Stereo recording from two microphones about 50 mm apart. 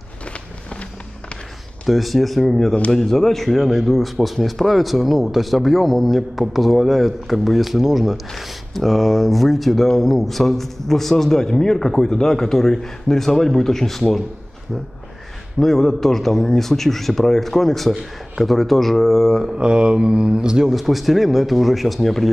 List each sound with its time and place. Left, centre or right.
1.9 s speech: centre
15.6 s speech: centre
19.5 s speech: centre
20.7 s speech: centre